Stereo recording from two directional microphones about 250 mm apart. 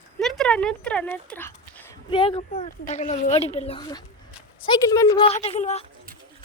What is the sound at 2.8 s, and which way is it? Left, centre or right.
A woman's voice, left.